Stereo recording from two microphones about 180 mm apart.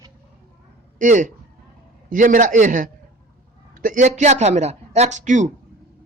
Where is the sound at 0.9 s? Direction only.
45° right (ahead or behind).